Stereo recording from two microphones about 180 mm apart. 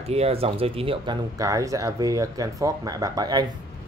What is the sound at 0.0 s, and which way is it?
Speech, 35° right (ahead or behind).